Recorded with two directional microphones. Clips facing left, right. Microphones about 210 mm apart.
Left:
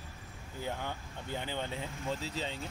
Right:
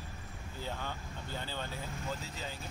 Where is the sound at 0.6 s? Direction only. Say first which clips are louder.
Left 3 dB; 15° left (ahead or behind).